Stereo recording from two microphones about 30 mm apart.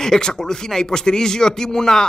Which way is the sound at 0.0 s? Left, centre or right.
Left.